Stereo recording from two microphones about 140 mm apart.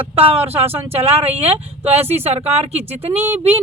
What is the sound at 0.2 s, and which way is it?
Speech, 45° right (ahead or behind).